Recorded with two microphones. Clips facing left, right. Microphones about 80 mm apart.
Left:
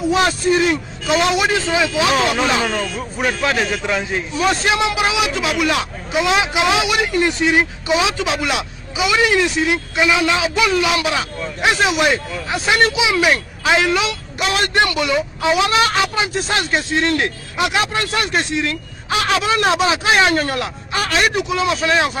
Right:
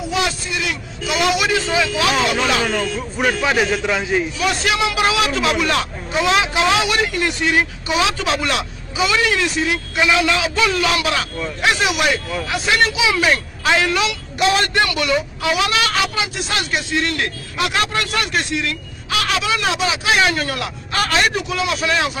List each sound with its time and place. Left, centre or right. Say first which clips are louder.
0.1 s a man's voice: left 7 dB; left
2.7 s a man's voice: right 1 dB; centre
4.4 s speech: left 2 dB; left
8.3 s speech: even; centre; by 20.7 s left
21.0 s a man's voice: even; centre
21.4 s speech: left 3 dB; centre